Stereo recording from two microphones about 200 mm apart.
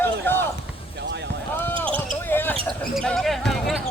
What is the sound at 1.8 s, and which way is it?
Basketball bounce, 5° left (ahead or behind).